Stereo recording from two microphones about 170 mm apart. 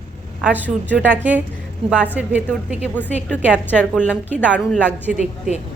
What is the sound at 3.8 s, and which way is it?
Speech, 5° right (ahead or behind).